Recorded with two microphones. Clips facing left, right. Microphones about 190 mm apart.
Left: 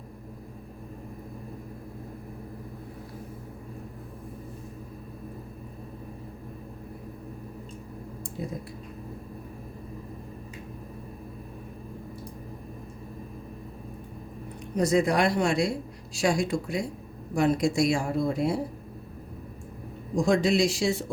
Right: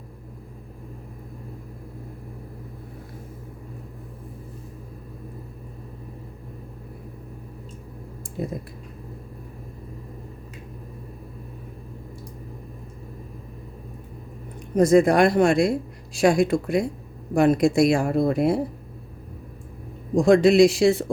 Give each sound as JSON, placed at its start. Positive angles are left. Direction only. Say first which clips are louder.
{"t": 8.4, "sound": "a sound", "louder": "right 6 dB", "side_deg": -55}
{"t": 14.8, "sound": "speech", "louder": "right 7 dB", "side_deg": -50}
{"t": 20.2, "sound": "speech", "louder": "right 8 dB", "side_deg": -60}